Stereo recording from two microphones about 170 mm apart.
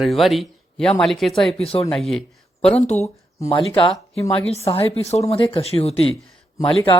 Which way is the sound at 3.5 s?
30° left (ahead or behind).